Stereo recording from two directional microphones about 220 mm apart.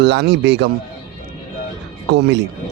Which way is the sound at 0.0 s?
50° right (ahead or behind).